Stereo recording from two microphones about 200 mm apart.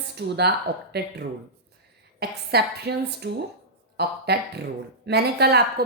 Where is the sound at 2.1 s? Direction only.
55° right (ahead or behind).